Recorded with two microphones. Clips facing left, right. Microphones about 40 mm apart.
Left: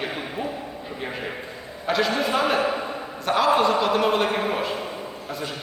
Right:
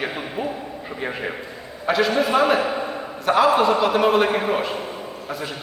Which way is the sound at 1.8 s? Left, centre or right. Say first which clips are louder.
Right 3 dB; centre.